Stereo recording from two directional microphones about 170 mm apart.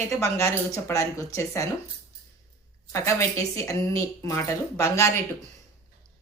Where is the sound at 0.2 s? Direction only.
15° left (ahead or behind).